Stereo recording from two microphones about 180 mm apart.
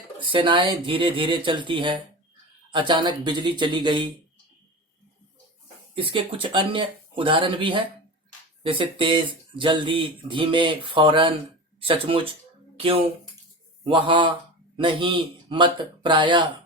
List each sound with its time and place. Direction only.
0.3 s speech: 30° right (ahead or behind)
5.9 s speech: 30° right (ahead or behind)